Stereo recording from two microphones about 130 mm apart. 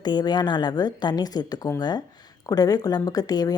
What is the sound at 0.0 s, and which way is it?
Speech, 35° left (ahead or behind).